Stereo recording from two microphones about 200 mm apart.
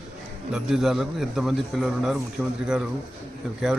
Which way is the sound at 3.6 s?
Centre (ahead or behind).